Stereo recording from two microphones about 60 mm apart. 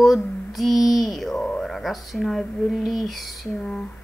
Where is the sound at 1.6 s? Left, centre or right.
Centre.